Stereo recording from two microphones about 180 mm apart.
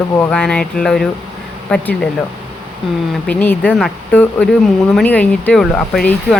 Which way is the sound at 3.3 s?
10° left (ahead or behind).